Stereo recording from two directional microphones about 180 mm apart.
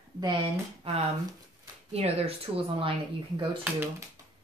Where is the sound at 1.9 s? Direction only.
35° right (ahead or behind).